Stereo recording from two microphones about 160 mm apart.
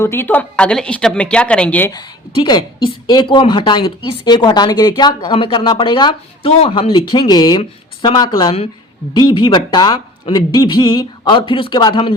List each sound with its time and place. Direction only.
0.0 s a woman's voice: 15° left (ahead or behind)
1.9 s a woman's voice: 25° left (ahead or behind)
7.6 s speech: 40° left (ahead or behind)
8.2 s a woman's voice: 25° left (ahead or behind)